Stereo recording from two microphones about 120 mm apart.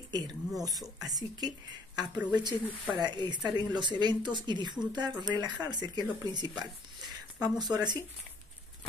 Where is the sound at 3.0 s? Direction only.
35° right (ahead or behind).